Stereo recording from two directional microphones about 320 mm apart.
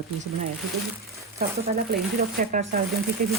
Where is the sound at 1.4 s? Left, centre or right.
Centre.